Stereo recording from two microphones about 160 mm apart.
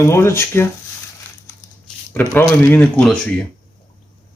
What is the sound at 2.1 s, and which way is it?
Speech, 15° left (ahead or behind).